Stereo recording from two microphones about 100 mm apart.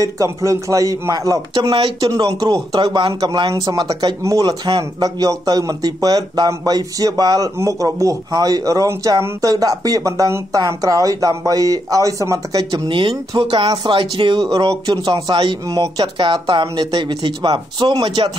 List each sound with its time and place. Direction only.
0.0 s a man's voice: 35° right (ahead or behind)
1.5 s speech: 50° right (ahead or behind)
2.8 s a man's voice: 45° right (ahead or behind)
12.8 s speech: 55° right (ahead or behind)